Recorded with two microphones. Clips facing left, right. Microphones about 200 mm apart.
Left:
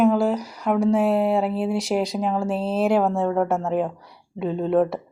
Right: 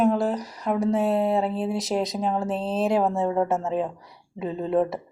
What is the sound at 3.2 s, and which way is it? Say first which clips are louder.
Speech: left 2 dB; 15° right (ahead or behind).